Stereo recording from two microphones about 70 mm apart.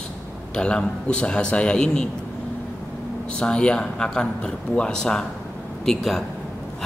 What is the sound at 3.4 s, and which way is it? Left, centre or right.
A man's voice, centre.